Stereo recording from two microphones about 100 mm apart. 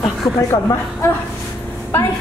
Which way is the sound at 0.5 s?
45° left (ahead or behind).